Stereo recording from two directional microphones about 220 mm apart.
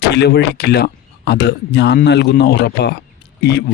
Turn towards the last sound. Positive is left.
turn(degrees=45)  # may be behind; listen again after turning